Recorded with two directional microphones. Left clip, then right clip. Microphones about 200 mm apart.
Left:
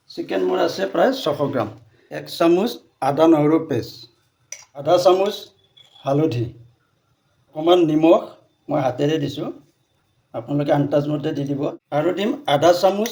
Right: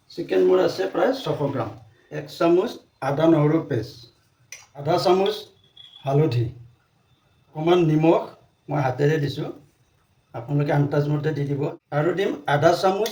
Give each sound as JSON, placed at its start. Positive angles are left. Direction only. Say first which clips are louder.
{"t": 0.1, "sound": "speech", "louder": "right 2 dB", "side_deg": 50}
{"t": 4.4, "sound": "cutlery", "louder": "left 6 dB", "side_deg": 30}
{"t": 6.0, "sound": "speech", "louder": "left 3 dB", "side_deg": 30}
{"t": 7.5, "sound": "speech", "louder": "left 4 dB", "side_deg": 35}
{"t": 10.6, "sound": "speech", "louder": "left 4 dB", "side_deg": 30}